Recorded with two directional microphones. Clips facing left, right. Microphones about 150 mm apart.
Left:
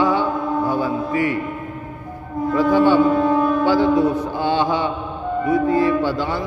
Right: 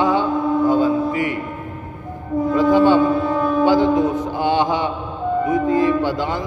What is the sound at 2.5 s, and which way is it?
Speech, 20° right (ahead or behind).